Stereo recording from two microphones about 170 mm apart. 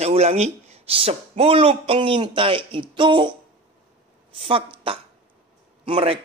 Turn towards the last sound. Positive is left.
turn(degrees=-35)  # may be behind; listen again after turning